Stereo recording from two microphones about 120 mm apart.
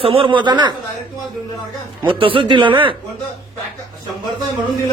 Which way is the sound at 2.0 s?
45° right (ahead or behind).